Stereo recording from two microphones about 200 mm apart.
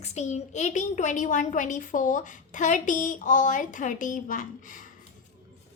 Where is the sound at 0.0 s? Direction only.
35° left (ahead or behind).